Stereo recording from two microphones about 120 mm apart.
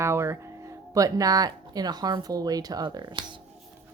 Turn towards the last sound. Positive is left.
turn(degrees=-40)  # may be behind; listen again after turning